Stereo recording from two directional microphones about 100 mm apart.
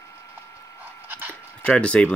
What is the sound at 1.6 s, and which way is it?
Speech, 10° left (ahead or behind).